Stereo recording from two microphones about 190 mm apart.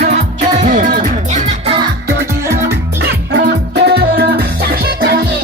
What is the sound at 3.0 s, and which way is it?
Music, 70° right (ahead or behind).